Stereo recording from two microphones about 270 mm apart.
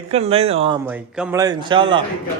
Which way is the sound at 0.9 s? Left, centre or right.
Centre.